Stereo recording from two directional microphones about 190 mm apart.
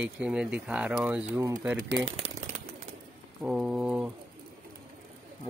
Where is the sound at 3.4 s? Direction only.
5° right (ahead or behind).